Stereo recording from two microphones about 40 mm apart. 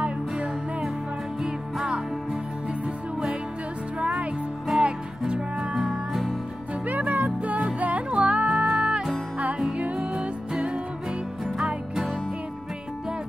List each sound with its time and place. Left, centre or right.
0.0 s music: right
4.0 s music: right
5.8 s music: centre
6.9 s music: right
8.5 s music: centre